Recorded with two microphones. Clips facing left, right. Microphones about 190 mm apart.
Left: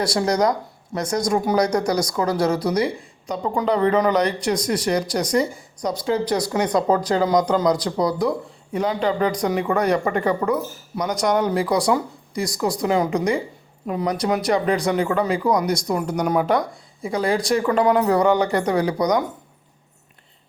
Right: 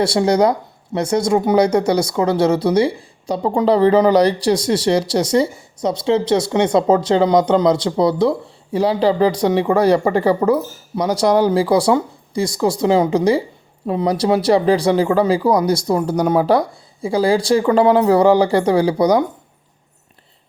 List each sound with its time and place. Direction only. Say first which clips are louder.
0.0 s speech: right 5 dB; 25° right (ahead or behind)